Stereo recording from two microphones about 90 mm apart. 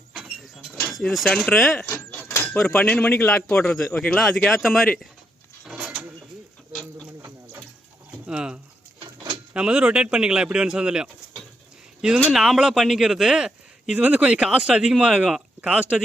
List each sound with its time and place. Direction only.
0.9 s a man's voice: centre (ahead or behind)
1.9 s a sound: 25° left (ahead or behind)
2.5 s speech: 5° left (ahead or behind)
2.7 s speech: 15° left (ahead or behind)
3.3 s a man's voice: 10° left (ahead or behind)
4.4 s a man's voice: centre (ahead or behind)
5.6 s a sound: 5° right (ahead or behind)
7.2 s water: 35° right (ahead or behind)
8.3 s a sound: 10° right (ahead or behind)
9.5 s speech: 10° right (ahead or behind)
12.3 s a man's voice: 5° right (ahead or behind)